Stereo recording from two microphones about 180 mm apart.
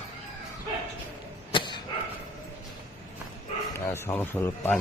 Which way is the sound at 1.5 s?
25° left (ahead or behind).